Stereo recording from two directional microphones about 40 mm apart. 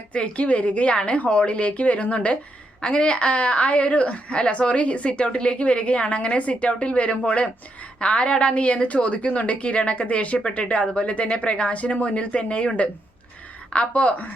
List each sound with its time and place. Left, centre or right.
0.1 s a woman's voice: left